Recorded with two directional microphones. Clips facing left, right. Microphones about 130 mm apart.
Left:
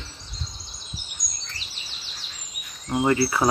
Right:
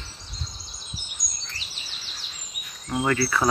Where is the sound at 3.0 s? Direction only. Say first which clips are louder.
Left 2 dB; 25° left (ahead or behind).